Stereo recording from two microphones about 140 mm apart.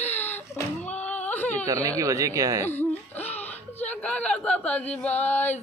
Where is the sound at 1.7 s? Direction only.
25° right (ahead or behind).